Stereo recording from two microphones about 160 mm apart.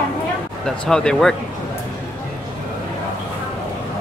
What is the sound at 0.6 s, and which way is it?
Speech, 5° left (ahead or behind).